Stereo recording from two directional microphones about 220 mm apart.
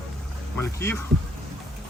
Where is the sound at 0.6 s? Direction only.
10° left (ahead or behind).